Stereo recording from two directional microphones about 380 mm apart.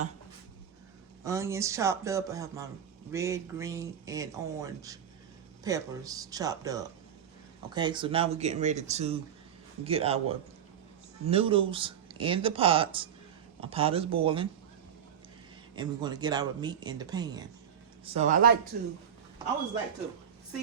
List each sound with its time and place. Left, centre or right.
1.2 s speech: centre
15.7 s speech: centre